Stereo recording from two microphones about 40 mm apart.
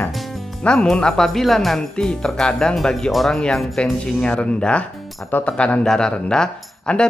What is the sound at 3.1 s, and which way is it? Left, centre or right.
Speech, centre.